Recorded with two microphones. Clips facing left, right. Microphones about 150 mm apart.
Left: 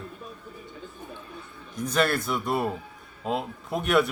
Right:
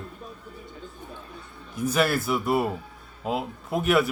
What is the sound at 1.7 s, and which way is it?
A man's voice, 5° right (ahead or behind).